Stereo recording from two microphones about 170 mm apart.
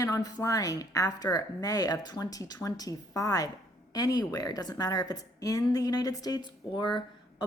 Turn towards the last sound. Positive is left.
turn(degrees=25)  # may be behind; listen again after turning